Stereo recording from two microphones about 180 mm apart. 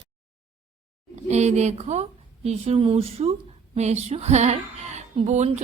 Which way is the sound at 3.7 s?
40° right (ahead or behind).